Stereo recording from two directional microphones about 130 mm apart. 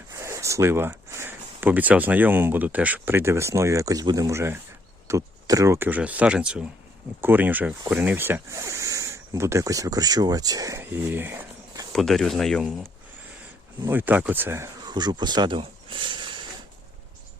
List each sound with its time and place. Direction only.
0.1 s speech: 20° right (ahead or behind)
10.8 s speech: 15° right (ahead or behind)
11.9 s speech: centre (ahead or behind)
13.8 s speech: 15° right (ahead or behind)
14.8 s speech: 35° right (ahead or behind)